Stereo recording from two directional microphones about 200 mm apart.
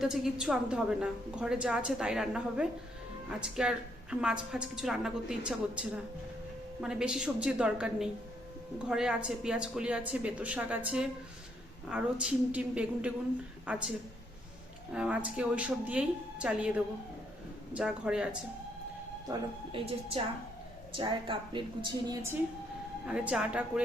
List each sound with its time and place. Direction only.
0.0 s a woman's voice: 5° right (ahead or behind)
14.9 s a woman's voice: 5° right (ahead or behind)
19.8 s a woman's voice: 25° right (ahead or behind)
23.0 s a woman's voice: 5° right (ahead or behind)